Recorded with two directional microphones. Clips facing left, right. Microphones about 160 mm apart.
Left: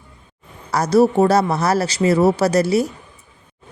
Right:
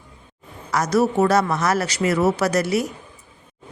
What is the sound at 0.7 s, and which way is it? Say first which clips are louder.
A woman's voice: left 5 dB; 30° left (ahead or behind).